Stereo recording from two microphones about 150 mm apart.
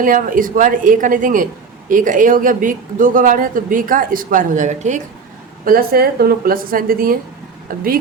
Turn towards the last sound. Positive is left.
turn(degrees=-70)  # may be behind; listen again after turning